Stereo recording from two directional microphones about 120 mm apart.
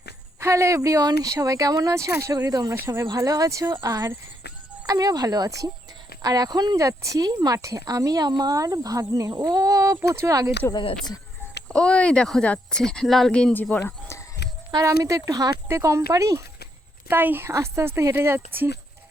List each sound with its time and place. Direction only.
0.3 s speech: 25° right (ahead or behind)
10.7 s speech: 40° left (ahead or behind)
11.7 s speech: 10° left (ahead or behind)
14.7 s speech: 30° right (ahead or behind)
17.1 s speech: 15° right (ahead or behind)